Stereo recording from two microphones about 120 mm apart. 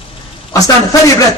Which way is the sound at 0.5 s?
30° left (ahead or behind).